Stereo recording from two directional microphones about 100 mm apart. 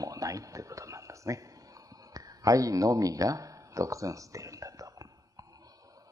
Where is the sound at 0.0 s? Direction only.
35° right (ahead or behind).